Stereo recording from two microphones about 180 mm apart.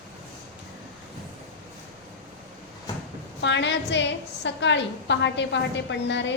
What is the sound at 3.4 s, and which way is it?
A woman's voice, 80° left.